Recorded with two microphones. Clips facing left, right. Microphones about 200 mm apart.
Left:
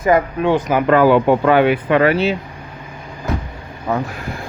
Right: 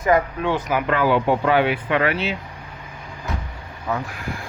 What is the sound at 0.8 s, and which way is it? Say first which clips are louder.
Speech: left 8 dB; 45° left (ahead or behind).